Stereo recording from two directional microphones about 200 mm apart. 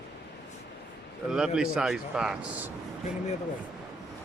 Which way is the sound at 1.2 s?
5° right (ahead or behind).